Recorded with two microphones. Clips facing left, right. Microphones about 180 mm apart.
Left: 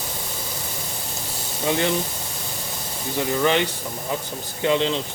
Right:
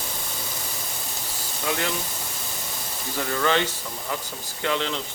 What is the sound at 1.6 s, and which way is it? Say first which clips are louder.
Speech: left 5 dB; 25° left (ahead or behind).